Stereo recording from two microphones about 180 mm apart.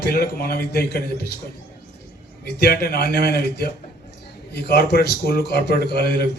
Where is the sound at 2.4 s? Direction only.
65° left (ahead or behind).